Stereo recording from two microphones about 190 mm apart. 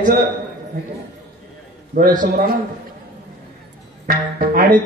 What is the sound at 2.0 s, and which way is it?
Speech, 45° right (ahead or behind).